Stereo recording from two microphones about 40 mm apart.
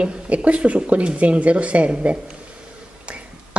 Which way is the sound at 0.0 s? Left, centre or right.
Right.